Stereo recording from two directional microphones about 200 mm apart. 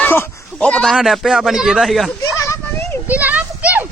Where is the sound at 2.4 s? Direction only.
15° left (ahead or behind).